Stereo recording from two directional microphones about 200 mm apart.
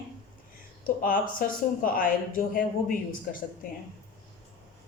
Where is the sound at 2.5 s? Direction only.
45° left (ahead or behind).